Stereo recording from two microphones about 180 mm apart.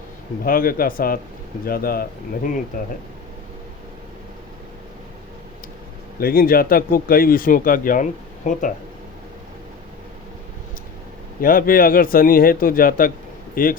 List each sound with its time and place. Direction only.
0.4 s speech: 55° left (ahead or behind)
6.1 s speech: 55° left (ahead or behind)
11.3 s speech: 50° left (ahead or behind)